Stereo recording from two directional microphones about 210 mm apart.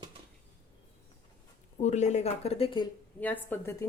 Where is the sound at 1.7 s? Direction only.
35° left (ahead or behind).